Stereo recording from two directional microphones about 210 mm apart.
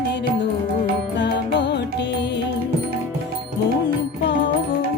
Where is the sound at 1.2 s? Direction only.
55° left (ahead or behind).